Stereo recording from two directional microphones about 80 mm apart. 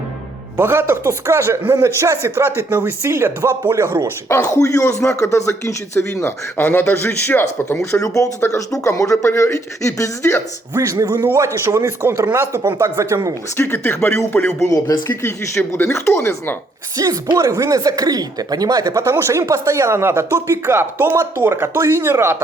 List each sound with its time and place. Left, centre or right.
0.5 s speech: right
4.3 s a man's voice: left
8.0 s speech: left
10.8 s speech: right
13.6 s a man's voice: left
14.7 s speech: left
15.2 s speech: left
17.0 s speech: right
19.0 s speech: right